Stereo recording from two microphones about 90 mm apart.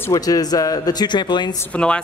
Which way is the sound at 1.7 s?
10° left (ahead or behind).